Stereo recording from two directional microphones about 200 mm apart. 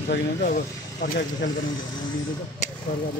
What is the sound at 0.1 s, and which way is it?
Speech, 45° left (ahead or behind).